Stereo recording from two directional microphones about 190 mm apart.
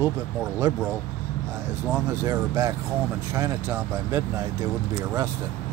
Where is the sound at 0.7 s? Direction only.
15° right (ahead or behind).